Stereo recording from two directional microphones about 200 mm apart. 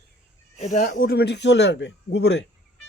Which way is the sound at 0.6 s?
35° left (ahead or behind).